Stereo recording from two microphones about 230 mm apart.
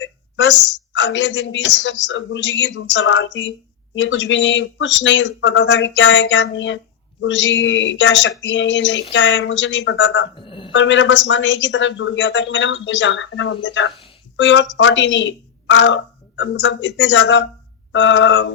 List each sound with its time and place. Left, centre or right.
0.0 s a woman's voice: left
10.3 s a sound: left
10.7 s speech: left